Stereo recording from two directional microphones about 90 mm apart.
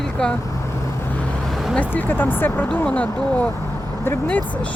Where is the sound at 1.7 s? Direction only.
15° left (ahead or behind).